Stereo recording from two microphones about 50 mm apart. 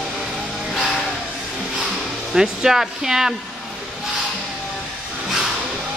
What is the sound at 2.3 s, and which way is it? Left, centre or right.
Speech, centre.